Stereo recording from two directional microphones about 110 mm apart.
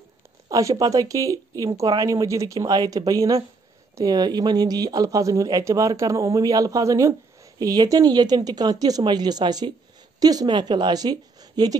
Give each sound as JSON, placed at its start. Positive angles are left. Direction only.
{"t": 0.5, "sound": "speech", "side_deg": -30}